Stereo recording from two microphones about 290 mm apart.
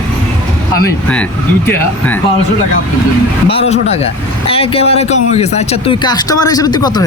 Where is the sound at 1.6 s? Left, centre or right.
Centre.